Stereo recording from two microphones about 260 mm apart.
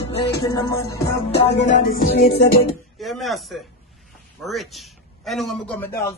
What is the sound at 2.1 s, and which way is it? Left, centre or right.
Music, left.